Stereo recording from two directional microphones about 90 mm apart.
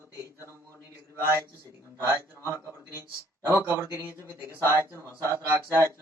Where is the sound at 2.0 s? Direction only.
30° right (ahead or behind).